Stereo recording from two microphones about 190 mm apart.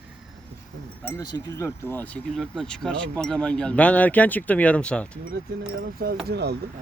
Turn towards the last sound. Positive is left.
turn(degrees=-60)  # may be behind; listen again after turning